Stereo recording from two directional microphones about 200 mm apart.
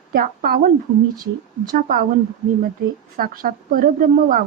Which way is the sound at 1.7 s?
45° right (ahead or behind).